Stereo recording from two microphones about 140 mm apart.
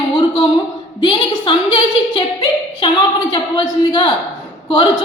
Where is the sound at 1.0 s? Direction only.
35° left (ahead or behind).